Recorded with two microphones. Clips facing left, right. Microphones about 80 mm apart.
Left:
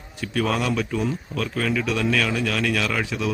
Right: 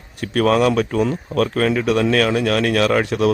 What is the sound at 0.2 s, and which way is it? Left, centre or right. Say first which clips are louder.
Speech: right 8 dB; right.